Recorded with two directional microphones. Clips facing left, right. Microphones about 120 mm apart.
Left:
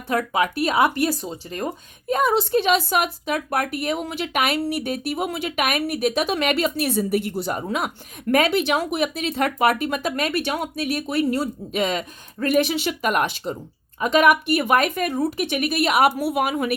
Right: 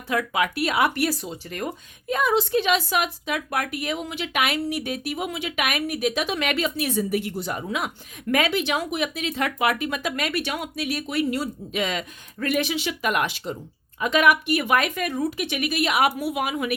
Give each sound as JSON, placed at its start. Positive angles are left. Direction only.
{"t": 0.1, "sound": "a woman's voice", "side_deg": 35}